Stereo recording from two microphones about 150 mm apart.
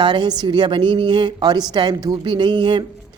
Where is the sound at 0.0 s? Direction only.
30° right (ahead or behind).